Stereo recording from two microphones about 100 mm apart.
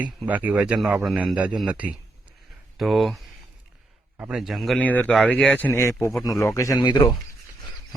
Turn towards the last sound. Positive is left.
turn(degrees=45)  # may be behind; listen again after turning